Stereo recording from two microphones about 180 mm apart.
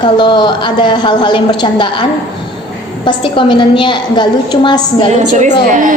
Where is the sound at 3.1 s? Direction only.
25° left (ahead or behind).